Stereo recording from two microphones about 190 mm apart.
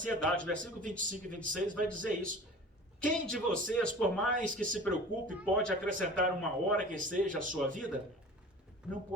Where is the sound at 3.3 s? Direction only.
5° left (ahead or behind).